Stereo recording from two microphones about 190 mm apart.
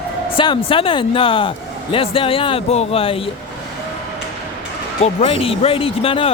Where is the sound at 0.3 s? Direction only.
25° left (ahead or behind).